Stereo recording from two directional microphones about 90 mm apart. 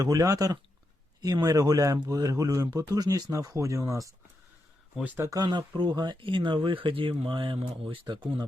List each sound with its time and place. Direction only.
0.0 s speech: 40° right (ahead or behind)
5.2 s speech: 40° right (ahead or behind)
5.5 s speech: 60° right (ahead or behind)